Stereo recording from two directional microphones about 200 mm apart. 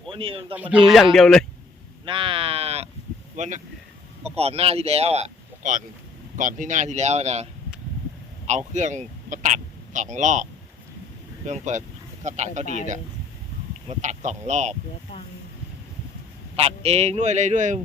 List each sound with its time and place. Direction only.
0.1 s speech: 25° right (ahead or behind)
0.5 s speech: 10° right (ahead or behind)
2.0 s speech: 25° right (ahead or behind)
8.4 s speech: 35° right (ahead or behind)
11.4 s speech: 35° right (ahead or behind)
13.8 s speech: 35° right (ahead or behind)
16.6 s speech: 30° right (ahead or behind)